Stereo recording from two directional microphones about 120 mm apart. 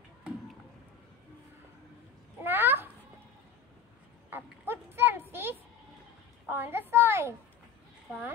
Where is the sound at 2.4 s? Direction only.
15° right (ahead or behind).